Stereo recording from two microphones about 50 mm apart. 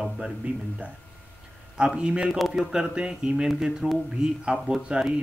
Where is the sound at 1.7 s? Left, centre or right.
Centre.